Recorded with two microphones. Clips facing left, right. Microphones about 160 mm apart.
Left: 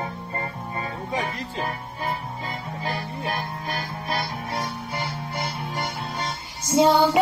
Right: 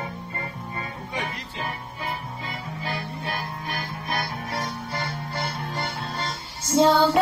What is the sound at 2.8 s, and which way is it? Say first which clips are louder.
Music: left 2 dB; 40° left (ahead or behind).